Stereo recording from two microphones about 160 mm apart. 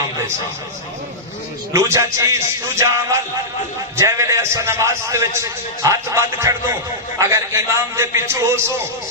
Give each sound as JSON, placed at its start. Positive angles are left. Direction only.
{"t": 1.7, "sound": "a man's voice", "side_deg": -20}